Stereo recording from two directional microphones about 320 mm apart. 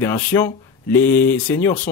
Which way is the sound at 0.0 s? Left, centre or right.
Centre.